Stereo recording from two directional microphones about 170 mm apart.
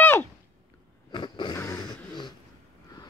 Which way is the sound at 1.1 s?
25° left (ahead or behind).